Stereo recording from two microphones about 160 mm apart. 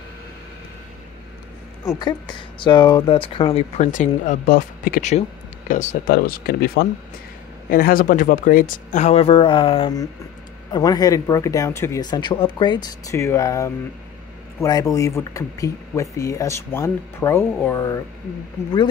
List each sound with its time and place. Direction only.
2.0 s speech: 25° left (ahead or behind); by 5.9 s 50° left (ahead or behind)
6.0 s speech: 70° left (ahead or behind)
7.7 s speech: 65° left (ahead or behind); by 12.8 s 30° left (ahead or behind)
13.1 s speech: 15° left (ahead or behind)